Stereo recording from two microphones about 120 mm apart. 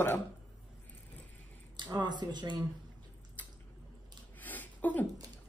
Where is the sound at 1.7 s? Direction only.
40° right (ahead or behind).